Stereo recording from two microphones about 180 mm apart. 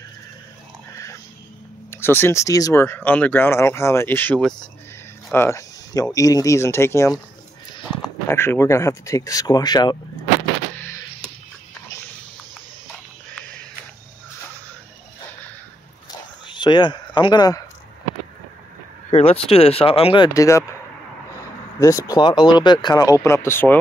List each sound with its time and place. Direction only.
1.9 s speech: 15° left (ahead or behind)
8.3 s speech: 15° left (ahead or behind)
16.1 s a sound: 25° left (ahead or behind)
19.0 s speech: 35° left (ahead or behind)
20.3 s speech: 15° left (ahead or behind)
21.7 s speech: 15° left (ahead or behind)